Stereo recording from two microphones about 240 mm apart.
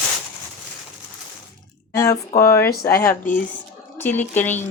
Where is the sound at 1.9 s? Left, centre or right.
Centre.